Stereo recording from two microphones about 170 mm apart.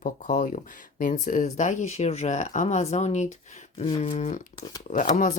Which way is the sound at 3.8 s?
30° left (ahead or behind).